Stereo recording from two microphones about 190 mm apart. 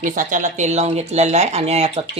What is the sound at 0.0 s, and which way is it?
Speech, 45° right (ahead or behind).